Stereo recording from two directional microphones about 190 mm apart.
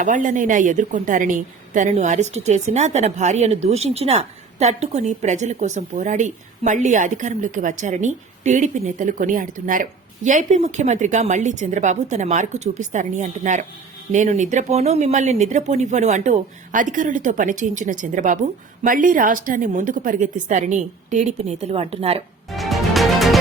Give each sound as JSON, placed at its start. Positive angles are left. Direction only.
{"t": 0.0, "sound": "a woman's voice", "side_deg": -45}
{"t": 22.4, "sound": "music", "side_deg": 0}